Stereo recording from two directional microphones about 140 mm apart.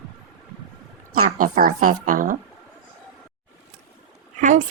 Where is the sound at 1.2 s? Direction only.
85° right.